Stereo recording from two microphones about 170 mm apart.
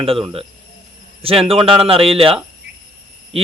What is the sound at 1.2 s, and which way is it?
Speech, 35° right (ahead or behind).